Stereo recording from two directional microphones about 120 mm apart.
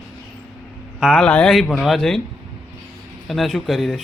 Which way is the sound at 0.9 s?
Centre (ahead or behind).